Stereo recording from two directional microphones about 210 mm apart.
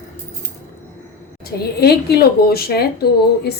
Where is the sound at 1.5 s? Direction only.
50° left (ahead or behind).